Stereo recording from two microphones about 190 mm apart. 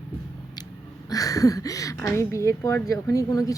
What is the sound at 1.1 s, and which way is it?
Speech, 20° left (ahead or behind).